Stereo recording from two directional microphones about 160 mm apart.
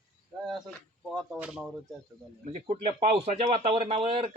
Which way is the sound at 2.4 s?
40° right (ahead or behind).